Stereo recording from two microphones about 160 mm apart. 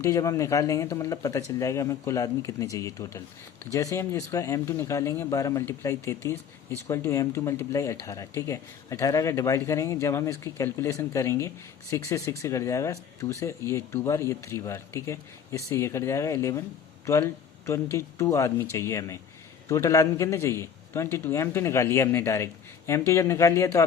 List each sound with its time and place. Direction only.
0.0 s speech: 20° left (ahead or behind)